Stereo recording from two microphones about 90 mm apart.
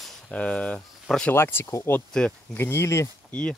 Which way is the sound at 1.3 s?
25° left (ahead or behind).